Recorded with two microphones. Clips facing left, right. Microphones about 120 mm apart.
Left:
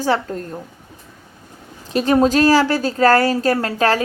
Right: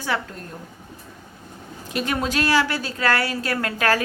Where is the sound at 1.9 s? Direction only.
35° left (ahead or behind).